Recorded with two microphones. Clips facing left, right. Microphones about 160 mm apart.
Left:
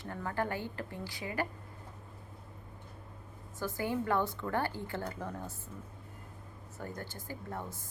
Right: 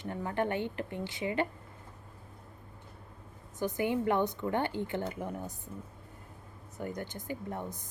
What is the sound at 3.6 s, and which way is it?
A woman's voice, 20° right (ahead or behind).